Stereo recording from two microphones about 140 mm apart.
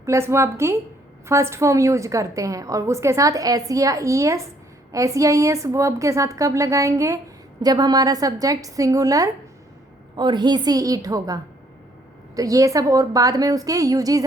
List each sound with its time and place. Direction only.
0.0 s a woman's voice: 20° right (ahead or behind)
12.4 s a woman's voice: 25° right (ahead or behind)